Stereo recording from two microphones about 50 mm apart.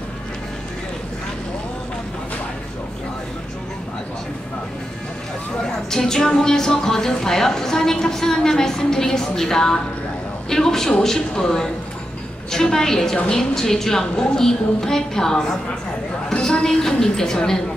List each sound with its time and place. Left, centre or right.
5.9 s speech: centre
16.3 s a sound: centre
16.9 s speech: centre